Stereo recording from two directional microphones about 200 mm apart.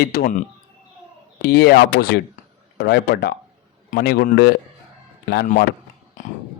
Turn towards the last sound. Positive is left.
turn(degrees=45)  # may be behind; listen again after turning